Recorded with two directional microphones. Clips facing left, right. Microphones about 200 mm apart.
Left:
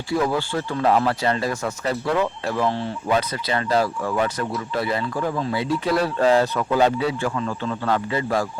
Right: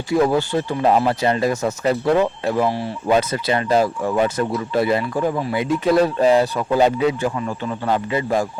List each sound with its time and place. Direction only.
0.5 s speech: 20° right (ahead or behind)
3.2 s speech: 25° right (ahead or behind)